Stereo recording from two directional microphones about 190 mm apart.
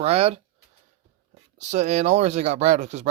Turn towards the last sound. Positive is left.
turn(degrees=-35)  # may be behind; listen again after turning